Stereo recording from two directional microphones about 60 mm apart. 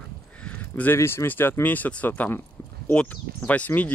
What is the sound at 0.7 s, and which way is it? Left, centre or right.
Speech, left.